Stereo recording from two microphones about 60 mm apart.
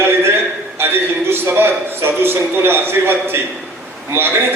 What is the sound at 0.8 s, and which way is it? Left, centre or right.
A man's voice, right.